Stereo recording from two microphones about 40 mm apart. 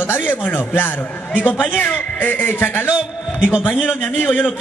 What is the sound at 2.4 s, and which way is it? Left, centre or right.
Speech, left.